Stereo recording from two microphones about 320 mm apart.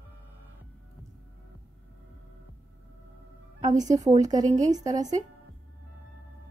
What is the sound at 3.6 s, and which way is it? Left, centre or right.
Speech, centre.